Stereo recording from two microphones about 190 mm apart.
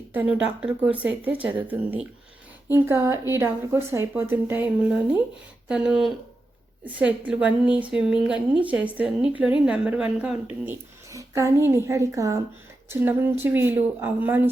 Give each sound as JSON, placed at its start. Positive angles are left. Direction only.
{"t": 0.1, "sound": "speech", "side_deg": -10}
{"t": 7.3, "sound": "speech", "side_deg": -5}
{"t": 10.7, "sound": "speech", "side_deg": -15}